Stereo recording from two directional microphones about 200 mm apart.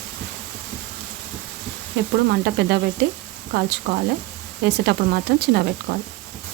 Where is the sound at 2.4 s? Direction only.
55° right (ahead or behind).